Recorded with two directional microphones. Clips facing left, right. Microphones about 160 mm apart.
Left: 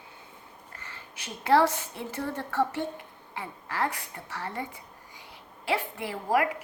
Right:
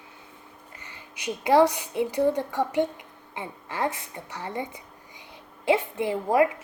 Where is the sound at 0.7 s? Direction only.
15° right (ahead or behind).